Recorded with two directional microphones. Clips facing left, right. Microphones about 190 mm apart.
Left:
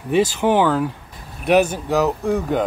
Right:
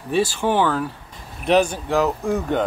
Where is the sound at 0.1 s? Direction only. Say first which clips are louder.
Left 3 dB; 20° left (ahead or behind).